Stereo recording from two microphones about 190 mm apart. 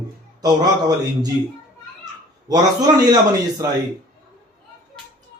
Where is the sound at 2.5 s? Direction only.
20° right (ahead or behind).